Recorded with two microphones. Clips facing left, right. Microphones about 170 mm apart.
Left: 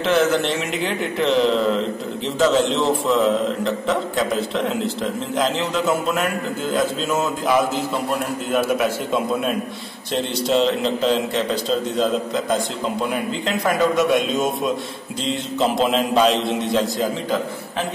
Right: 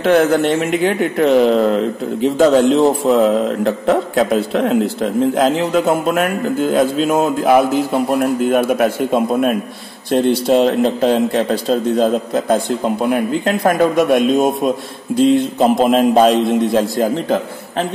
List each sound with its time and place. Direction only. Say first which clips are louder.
0.0 s a man's voice: right 6 dB; 55° right (ahead or behind)